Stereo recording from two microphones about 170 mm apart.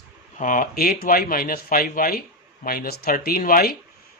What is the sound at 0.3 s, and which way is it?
Speech, 50° left (ahead or behind).